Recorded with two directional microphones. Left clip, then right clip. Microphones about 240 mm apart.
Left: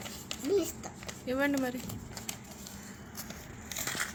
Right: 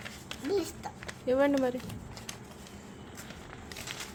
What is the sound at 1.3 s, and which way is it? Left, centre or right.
Speech, centre.